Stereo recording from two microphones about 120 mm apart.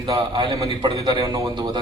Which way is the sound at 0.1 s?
30° right (ahead or behind).